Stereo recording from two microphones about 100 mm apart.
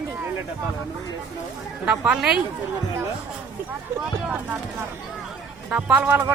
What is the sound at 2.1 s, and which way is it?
Speech, 5° right (ahead or behind).